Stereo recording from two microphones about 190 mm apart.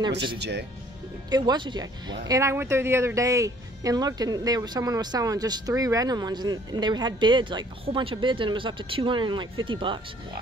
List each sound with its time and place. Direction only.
0.4 s speech: 65° right (ahead or behind)
1.3 s speech: 20° right (ahead or behind)